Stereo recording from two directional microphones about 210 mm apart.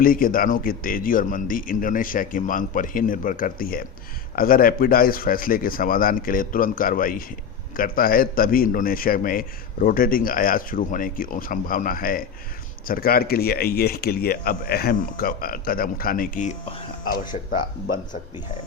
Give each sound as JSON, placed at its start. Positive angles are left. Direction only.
{"t": 0.0, "sound": "a man's voice", "side_deg": 40}